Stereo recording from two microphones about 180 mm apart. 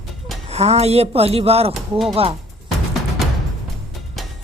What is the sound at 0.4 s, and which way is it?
Speech, 35° right (ahead or behind).